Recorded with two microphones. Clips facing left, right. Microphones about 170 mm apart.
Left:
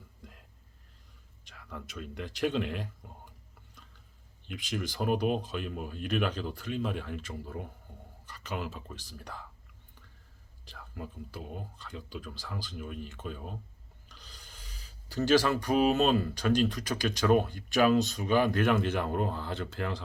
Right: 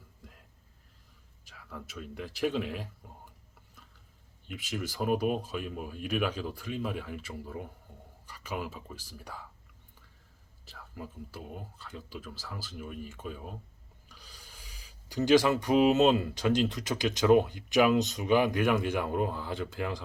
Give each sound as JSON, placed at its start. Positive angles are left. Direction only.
{"t": 1.5, "sound": "a man's voice", "side_deg": -5}
{"t": 4.4, "sound": "speech", "side_deg": -5}
{"t": 10.7, "sound": "speech", "side_deg": -5}